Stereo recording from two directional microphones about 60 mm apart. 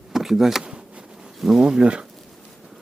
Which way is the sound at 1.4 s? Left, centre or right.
Centre.